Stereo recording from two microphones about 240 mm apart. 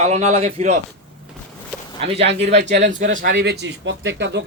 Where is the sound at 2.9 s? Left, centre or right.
Right.